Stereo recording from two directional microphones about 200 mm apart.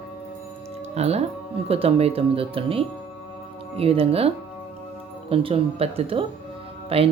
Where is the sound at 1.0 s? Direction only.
30° right (ahead or behind).